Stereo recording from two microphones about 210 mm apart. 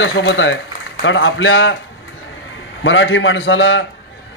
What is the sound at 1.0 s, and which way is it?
Speech, 65° left (ahead or behind).